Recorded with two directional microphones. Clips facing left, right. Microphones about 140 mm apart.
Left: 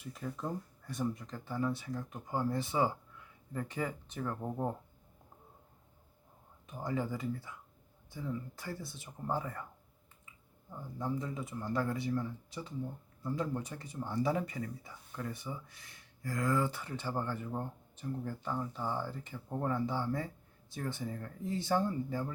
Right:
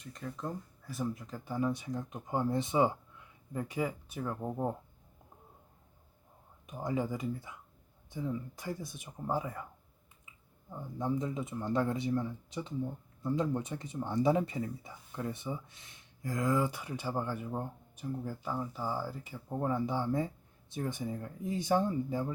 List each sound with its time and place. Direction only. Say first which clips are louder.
0.0 s speech: even; 5° left (ahead or behind)
6.7 s speech: right 2 dB; 15° right (ahead or behind)
10.7 s speech: right 3 dB; 15° right (ahead or behind)